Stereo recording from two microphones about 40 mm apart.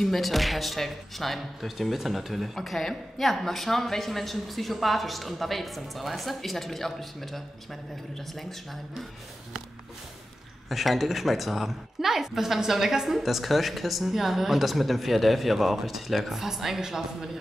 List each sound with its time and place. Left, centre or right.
0.0 s speech: centre
10.7 s speech: centre